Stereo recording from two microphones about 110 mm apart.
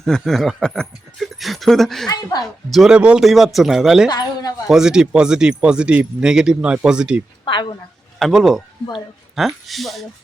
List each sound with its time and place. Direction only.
0.0 s speech: 5° left (ahead or behind)
7.4 s speech: 45° left (ahead or behind)
8.2 s speech: centre (ahead or behind)